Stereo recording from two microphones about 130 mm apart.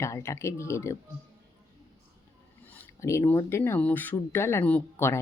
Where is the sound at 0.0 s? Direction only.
20° left (ahead or behind).